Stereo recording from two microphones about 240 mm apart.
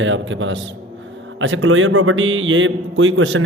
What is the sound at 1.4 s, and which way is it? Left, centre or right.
A man's voice, right.